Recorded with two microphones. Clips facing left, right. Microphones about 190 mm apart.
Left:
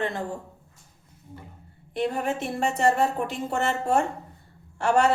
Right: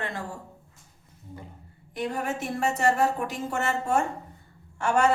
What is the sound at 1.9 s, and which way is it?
A woman's voice, 30° left (ahead or behind).